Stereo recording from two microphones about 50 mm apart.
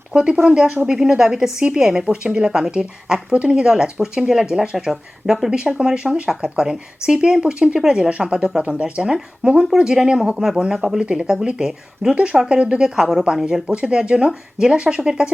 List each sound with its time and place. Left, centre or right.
0.1 s speech: centre
11.0 s speech: right